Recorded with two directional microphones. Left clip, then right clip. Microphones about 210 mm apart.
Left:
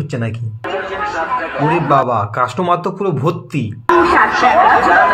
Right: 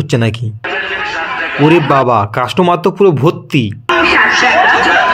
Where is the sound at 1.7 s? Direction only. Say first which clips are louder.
Right 3 dB; 40° right (ahead or behind).